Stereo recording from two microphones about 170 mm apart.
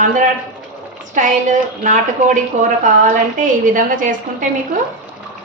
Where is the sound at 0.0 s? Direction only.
50° right (ahead or behind).